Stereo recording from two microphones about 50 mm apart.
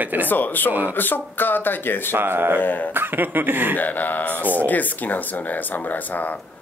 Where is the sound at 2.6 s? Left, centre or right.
Left.